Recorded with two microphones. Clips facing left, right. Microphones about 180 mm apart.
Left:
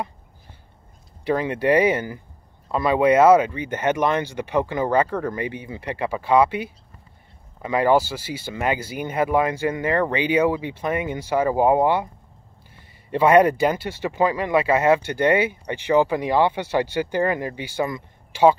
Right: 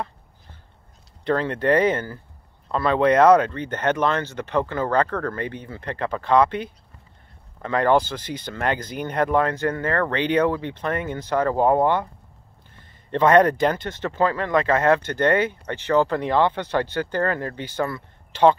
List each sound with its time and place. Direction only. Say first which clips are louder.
1.2 s speech: left 1 dB; 10° left (ahead or behind)